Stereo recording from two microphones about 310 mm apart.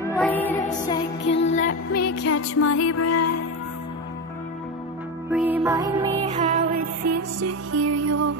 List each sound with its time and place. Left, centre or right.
0.1 s music: centre
1.2 s music: left
1.9 s music: left
5.3 s music: centre; by 6.6 s right
7.2 s music: right